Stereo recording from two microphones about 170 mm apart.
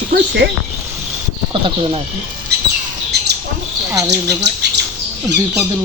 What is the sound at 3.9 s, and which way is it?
Speech, 20° right (ahead or behind).